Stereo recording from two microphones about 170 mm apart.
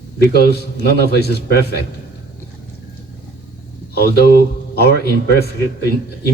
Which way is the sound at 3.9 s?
65° left (ahead or behind).